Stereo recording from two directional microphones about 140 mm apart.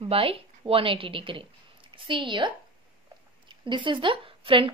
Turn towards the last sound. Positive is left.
turn(degrees=-40)  # may be behind; listen again after turning